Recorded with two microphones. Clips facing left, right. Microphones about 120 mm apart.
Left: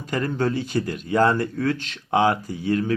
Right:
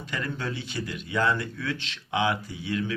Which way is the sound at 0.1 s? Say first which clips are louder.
Left 9 dB; 40° left (ahead or behind).